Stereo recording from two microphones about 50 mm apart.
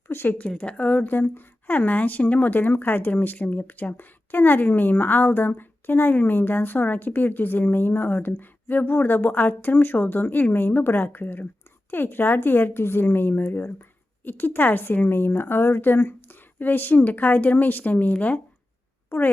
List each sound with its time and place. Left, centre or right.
0.1 s a sound: left
0.3 s a woman's voice: left
19.1 s speech: left